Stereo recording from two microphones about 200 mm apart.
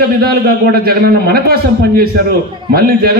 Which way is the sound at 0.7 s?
50° right (ahead or behind).